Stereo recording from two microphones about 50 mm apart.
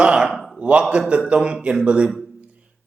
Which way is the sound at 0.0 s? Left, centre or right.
Right.